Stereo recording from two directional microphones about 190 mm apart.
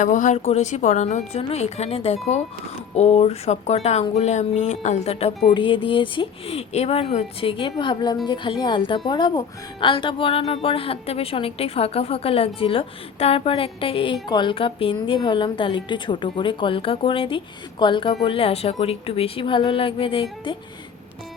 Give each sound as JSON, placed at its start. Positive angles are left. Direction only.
{"t": 0.0, "sound": "speech", "side_deg": 40}